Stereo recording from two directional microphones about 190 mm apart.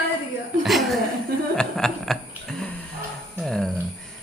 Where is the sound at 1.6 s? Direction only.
Centre (ahead or behind).